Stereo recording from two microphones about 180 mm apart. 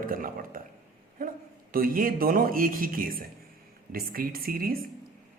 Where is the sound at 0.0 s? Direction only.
50° right (ahead or behind).